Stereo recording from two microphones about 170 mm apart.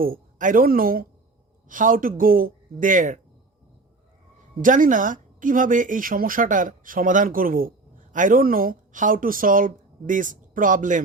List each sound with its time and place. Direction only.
0.0 s a woman's voice: 55° right (ahead or behind)
4.6 s speech: 50° right (ahead or behind)